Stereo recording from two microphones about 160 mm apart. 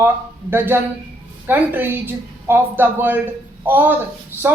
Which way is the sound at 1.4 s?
10° right (ahead or behind).